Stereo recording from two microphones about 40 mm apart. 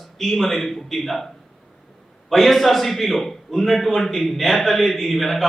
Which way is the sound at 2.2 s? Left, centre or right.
Centre.